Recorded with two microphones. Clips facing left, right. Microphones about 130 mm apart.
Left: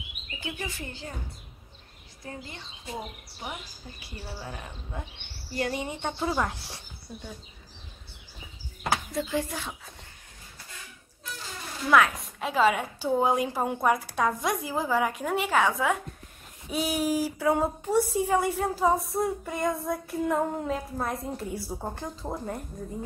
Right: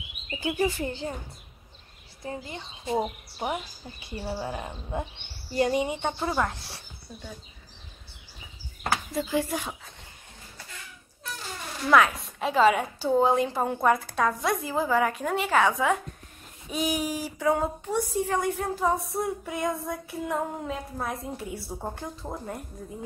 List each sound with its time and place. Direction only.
0.4 s speech: 35° right (ahead or behind)
2.2 s speech: 25° right (ahead or behind)
3.0 s speech: 40° right (ahead or behind)
4.1 s speech: 30° right (ahead or behind)
5.9 s a woman's voice: 5° right (ahead or behind)
6.2 s a woman's voice: 5° left (ahead or behind)
9.1 s a woman's voice: 5° right (ahead or behind)
9.5 s speech: 15° right (ahead or behind)
11.9 s a woman's voice: centre (ahead or behind)